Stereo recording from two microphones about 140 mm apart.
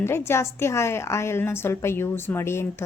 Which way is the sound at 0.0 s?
15° left (ahead or behind).